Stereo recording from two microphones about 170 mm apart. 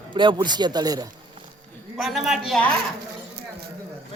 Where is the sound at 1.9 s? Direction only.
Centre (ahead or behind).